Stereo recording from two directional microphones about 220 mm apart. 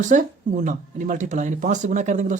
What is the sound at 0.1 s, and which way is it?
Speech, 35° right (ahead or behind).